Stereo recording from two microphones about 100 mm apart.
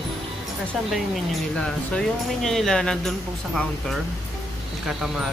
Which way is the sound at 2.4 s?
5° left (ahead or behind).